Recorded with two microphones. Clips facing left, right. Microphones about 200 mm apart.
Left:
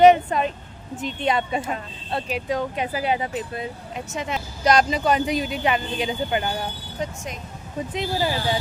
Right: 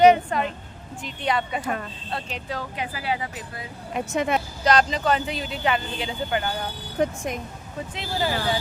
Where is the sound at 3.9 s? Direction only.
55° right (ahead or behind).